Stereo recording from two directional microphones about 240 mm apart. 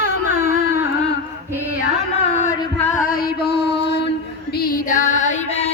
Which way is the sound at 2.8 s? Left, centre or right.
Left.